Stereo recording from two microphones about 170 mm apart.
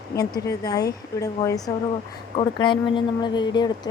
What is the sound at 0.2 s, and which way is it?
Speech, 20° left (ahead or behind).